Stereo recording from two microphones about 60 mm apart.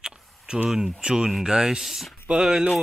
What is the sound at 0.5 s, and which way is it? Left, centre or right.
Speech, centre.